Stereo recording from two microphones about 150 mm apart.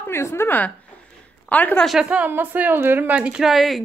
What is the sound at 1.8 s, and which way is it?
Speech, 5° right (ahead or behind).